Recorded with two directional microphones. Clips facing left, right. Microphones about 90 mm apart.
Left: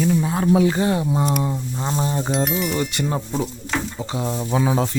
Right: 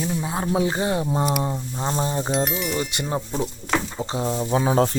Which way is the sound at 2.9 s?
20° right (ahead or behind).